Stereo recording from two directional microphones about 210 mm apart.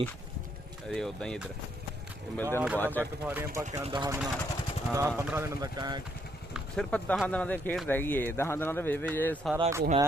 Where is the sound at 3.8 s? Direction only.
25° right (ahead or behind).